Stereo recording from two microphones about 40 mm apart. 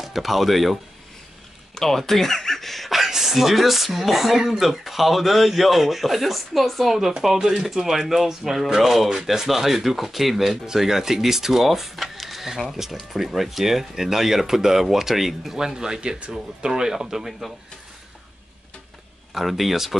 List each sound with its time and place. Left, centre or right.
0.0 s speech: centre
1.8 s a sound: centre
3.0 s speech: centre
19.3 s speech: centre